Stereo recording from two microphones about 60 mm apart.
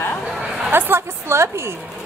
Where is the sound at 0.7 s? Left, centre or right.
Right.